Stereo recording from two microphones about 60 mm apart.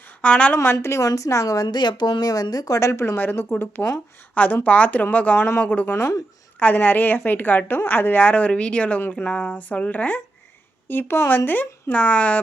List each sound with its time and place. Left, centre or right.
0.2 s speech: left
0.6 s speech: left
1.0 s speech: left
2.2 s speech: left
3.2 s a woman's voice: left
3.8 s speech: centre
4.4 s speech: left
5.9 s a woman's voice: left
6.6 s a woman's voice: left